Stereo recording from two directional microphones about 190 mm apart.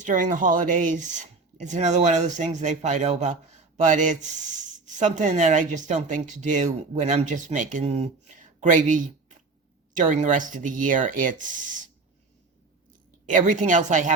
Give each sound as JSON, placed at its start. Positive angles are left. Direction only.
{"t": 0.0, "sound": "speech", "side_deg": -40}
{"t": 13.2, "sound": "speech", "side_deg": -40}